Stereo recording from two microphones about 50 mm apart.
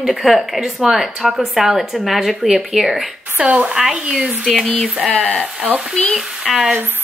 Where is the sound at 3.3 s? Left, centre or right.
Right.